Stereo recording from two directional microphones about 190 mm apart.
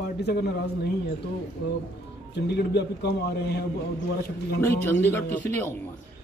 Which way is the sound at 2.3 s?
60° left (ahead or behind).